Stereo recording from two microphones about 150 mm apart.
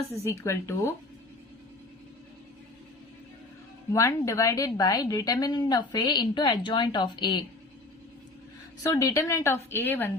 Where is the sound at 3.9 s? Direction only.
20° left (ahead or behind).